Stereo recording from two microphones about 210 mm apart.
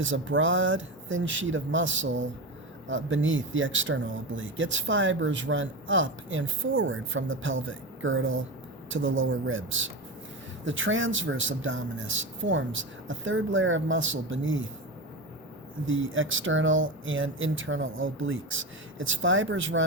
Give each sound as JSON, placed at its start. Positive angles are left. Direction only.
{"t": 0.0, "sound": "speech", "side_deg": -65}
{"t": 15.9, "sound": "speech", "side_deg": -70}